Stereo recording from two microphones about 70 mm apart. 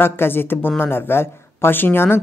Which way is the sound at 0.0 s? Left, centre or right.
Left.